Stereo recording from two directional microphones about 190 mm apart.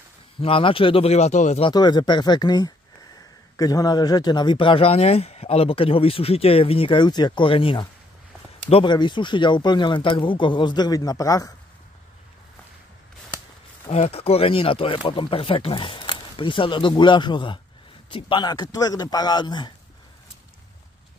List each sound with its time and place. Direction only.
0.4 s speech: 30° left (ahead or behind)
1.7 s speech: 20° left (ahead or behind)
13.8 s speech: 35° left (ahead or behind)